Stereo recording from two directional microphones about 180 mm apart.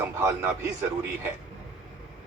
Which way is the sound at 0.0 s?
10° right (ahead or behind).